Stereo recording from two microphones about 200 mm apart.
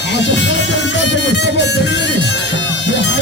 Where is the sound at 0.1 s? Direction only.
60° left (ahead or behind).